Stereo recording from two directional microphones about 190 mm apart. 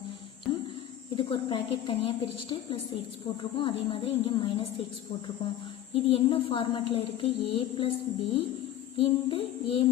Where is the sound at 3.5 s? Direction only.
25° left (ahead or behind).